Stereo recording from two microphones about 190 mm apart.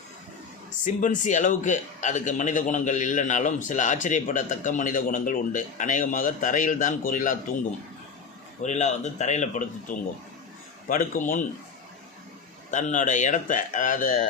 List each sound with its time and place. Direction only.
1.0 s a man's voice: 40° left (ahead or behind)
8.6 s a man's voice: 35° left (ahead or behind)
12.7 s speech: 40° left (ahead or behind)